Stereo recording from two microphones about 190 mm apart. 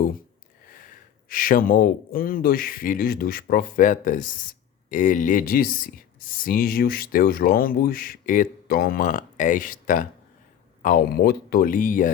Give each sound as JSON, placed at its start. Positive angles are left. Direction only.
{"t": 0.7, "sound": "speech", "side_deg": 45}